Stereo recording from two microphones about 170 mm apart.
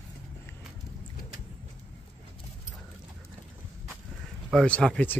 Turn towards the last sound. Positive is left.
turn(degrees=5)  # may be behind; listen again after turning